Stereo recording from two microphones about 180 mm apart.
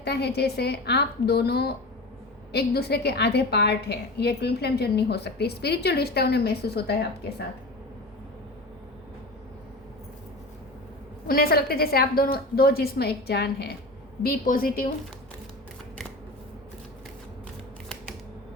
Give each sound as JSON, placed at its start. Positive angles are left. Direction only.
{"t": 0.0, "sound": "a woman's voice", "side_deg": 65}
{"t": 11.3, "sound": "a woman's voice", "side_deg": 55}